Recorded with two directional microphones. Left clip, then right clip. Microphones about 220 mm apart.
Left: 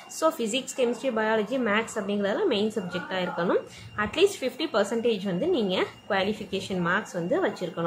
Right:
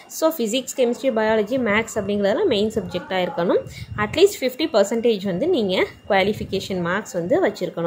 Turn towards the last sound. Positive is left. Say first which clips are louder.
# right 7 dB
turn(degrees=-20)  # may be behind; listen again after turning